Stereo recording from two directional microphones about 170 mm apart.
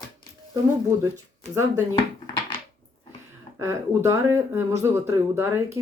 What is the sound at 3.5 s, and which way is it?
Speech, 15° right (ahead or behind).